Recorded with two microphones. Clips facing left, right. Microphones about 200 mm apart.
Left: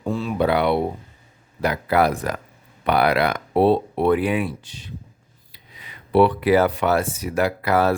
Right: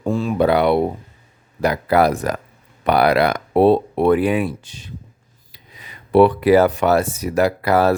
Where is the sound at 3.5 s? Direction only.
50° right (ahead or behind).